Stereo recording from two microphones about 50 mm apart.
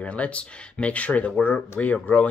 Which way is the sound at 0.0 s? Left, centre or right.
Left.